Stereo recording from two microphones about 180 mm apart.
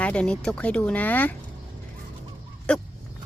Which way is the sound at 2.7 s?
5° left (ahead or behind).